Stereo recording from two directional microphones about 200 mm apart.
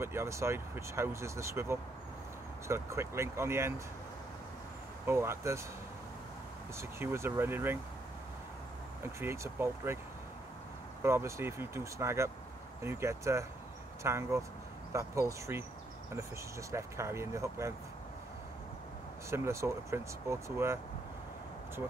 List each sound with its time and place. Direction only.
0.0 s speech: 15° right (ahead or behind)
5.0 s speech: 15° right (ahead or behind)
6.8 s speech: 10° right (ahead or behind)
9.0 s speech: 15° right (ahead or behind)
11.0 s speech: 10° right (ahead or behind)
16.7 s speech: 15° right (ahead or behind)
19.3 s speech: 15° right (ahead or behind)